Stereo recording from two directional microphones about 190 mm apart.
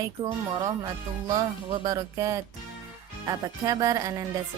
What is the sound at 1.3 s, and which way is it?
Speech, 20° right (ahead or behind).